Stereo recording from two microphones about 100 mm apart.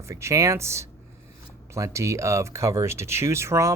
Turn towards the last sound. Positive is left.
turn(degrees=-30)  # may be behind; listen again after turning